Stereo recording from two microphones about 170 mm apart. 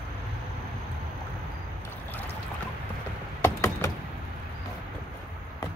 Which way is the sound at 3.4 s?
15° left (ahead or behind).